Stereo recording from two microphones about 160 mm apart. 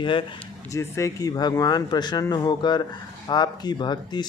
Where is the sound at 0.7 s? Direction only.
20° left (ahead or behind).